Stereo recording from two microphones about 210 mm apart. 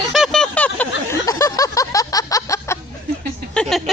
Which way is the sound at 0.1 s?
Centre (ahead or behind).